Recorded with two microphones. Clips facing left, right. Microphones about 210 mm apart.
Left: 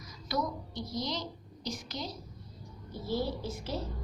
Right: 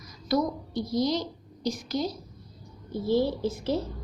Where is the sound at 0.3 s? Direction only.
35° right (ahead or behind).